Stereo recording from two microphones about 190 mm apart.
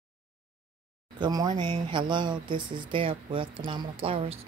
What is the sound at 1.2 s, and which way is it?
A woman's voice, 20° right (ahead or behind).